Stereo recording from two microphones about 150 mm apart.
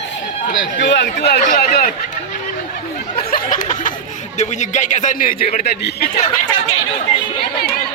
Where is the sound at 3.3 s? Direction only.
60° left (ahead or behind).